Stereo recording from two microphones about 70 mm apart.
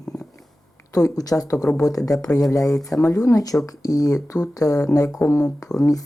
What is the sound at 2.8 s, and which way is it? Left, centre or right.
Speech, centre.